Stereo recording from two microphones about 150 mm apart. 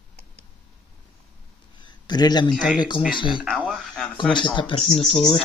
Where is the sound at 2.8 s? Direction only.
30° left (ahead or behind).